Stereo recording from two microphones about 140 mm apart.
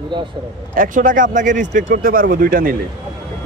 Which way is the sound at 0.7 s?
75° right (ahead or behind).